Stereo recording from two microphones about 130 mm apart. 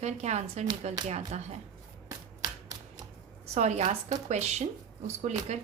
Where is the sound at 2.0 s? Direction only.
30° right (ahead or behind).